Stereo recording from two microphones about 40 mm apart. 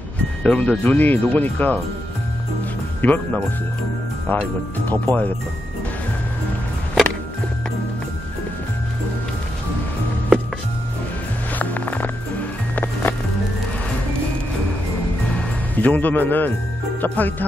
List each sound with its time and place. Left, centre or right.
0.4 s speech: left
3.0 s speech: left
4.3 s speech: left
11.5 s music: left
12.7 s music: left
15.7 s speech: left